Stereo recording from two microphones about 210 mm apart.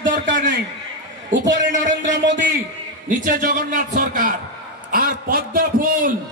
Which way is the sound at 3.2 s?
40° right (ahead or behind).